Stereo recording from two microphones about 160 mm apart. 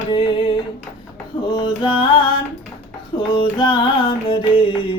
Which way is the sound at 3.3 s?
30° left (ahead or behind).